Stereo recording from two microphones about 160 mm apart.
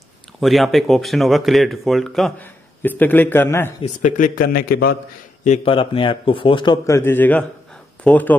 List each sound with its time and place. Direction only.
0.4 s speech: centre (ahead or behind)
3.8 s a man's voice: 55° left (ahead or behind); by 4.9 s 75° left (ahead or behind)
5.7 s a man's voice: 35° left (ahead or behind)
7.0 s a man's voice: 15° left (ahead or behind)